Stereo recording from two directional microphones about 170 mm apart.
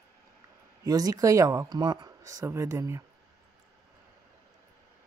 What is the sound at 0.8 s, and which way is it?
Speech, 20° right (ahead or behind).